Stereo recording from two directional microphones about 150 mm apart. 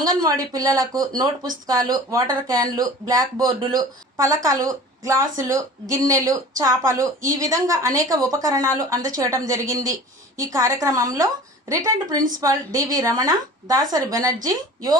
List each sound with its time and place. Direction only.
0.0 s speech: 25° right (ahead or behind)